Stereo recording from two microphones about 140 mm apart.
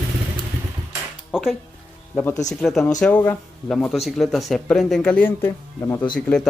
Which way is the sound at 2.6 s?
Centre (ahead or behind).